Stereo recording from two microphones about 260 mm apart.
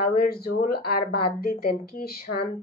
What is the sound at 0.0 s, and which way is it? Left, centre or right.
A woman's voice, left.